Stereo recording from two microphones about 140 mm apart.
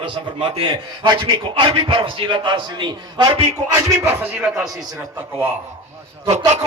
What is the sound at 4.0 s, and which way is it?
Speech, 15° right (ahead or behind).